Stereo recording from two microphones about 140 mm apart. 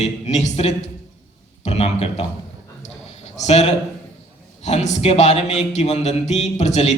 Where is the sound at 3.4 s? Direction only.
50° left (ahead or behind).